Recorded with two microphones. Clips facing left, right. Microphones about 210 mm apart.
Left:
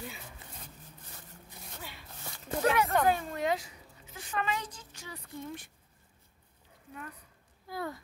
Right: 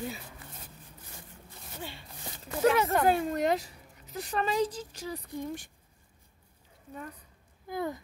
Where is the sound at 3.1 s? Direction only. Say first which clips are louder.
Right 3 dB; 40° right (ahead or behind).